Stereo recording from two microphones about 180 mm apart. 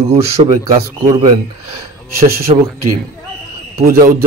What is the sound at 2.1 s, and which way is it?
Speech, 55° right (ahead or behind).